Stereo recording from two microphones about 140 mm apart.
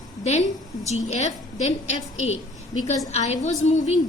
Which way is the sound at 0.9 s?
50° left (ahead or behind).